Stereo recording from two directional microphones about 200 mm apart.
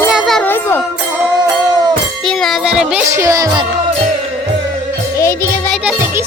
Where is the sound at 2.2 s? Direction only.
Centre (ahead or behind).